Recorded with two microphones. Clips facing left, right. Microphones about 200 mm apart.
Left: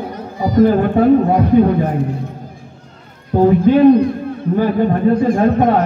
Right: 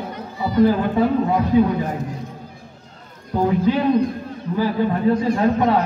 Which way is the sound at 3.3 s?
55° left (ahead or behind).